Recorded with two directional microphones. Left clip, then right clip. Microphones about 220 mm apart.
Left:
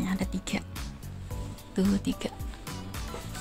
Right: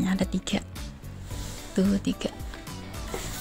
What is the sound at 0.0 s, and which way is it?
Speech, 15° right (ahead or behind).